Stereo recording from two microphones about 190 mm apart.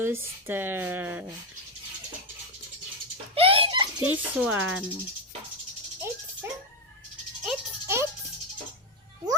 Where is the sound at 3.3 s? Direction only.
30° right (ahead or behind).